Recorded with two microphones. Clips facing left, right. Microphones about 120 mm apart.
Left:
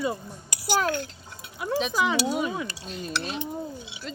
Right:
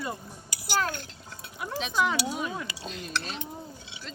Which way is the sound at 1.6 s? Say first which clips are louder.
Left 3 dB; centre (ahead or behind).